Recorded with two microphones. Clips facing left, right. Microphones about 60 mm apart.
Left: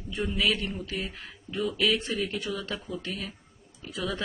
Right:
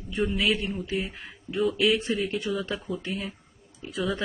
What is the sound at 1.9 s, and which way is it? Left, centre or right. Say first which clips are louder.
Speech: right 3 dB; right.